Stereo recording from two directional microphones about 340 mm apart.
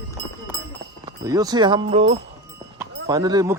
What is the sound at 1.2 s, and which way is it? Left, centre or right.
Speech, centre.